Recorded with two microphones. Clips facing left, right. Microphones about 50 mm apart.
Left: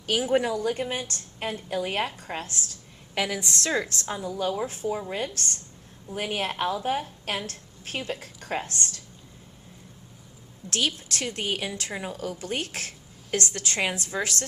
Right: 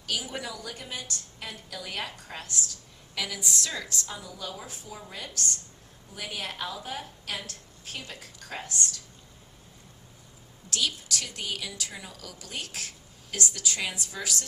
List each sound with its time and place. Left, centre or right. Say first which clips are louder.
0.0 s a woman's voice: left 10 dB; left
10.7 s a woman's voice: left 3 dB; left